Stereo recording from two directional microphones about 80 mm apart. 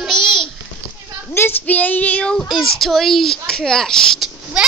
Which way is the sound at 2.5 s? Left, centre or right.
Centre.